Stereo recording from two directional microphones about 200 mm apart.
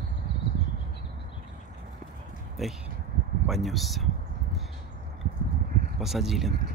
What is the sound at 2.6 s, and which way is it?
Speech, centre (ahead or behind).